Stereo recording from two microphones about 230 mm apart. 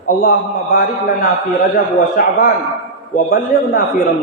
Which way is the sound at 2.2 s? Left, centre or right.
Left.